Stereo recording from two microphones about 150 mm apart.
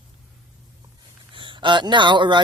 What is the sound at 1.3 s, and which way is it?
Speech, 35° right (ahead or behind).